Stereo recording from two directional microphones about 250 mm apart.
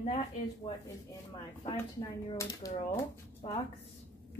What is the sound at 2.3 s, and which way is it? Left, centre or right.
Speech, centre.